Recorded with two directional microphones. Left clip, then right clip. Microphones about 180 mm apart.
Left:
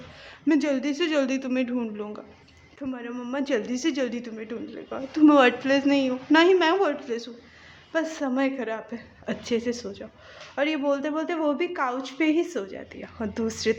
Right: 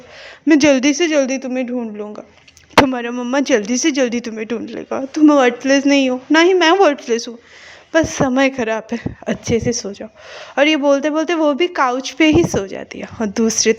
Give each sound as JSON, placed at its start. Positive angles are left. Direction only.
{"t": 0.4, "sound": "a man's voice", "side_deg": -45}
{"t": 1.0, "sound": "a woman's voice", "side_deg": -30}
{"t": 2.8, "sound": "a man's voice", "side_deg": -55}
{"t": 5.2, "sound": "a woman's voice", "side_deg": -30}